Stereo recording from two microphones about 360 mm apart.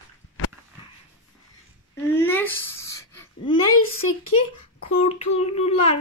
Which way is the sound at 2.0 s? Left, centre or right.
Centre.